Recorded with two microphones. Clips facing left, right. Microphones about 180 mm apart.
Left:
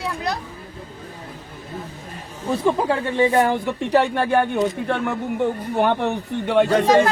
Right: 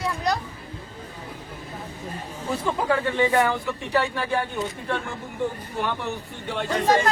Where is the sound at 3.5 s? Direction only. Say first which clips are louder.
Left 6 dB; 55° left (ahead or behind).